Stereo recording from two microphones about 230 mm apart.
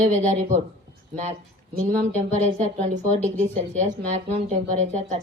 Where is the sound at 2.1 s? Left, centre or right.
Right.